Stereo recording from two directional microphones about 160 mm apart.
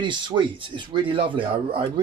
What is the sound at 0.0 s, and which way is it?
Speech, 30° right (ahead or behind).